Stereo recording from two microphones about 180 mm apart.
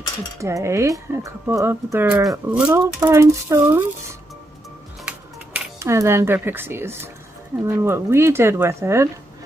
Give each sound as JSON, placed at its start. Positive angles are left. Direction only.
{"t": 0.4, "sound": "speech", "side_deg": -15}
{"t": 5.0, "sound": "music", "side_deg": -10}
{"t": 7.6, "sound": "speech", "side_deg": -15}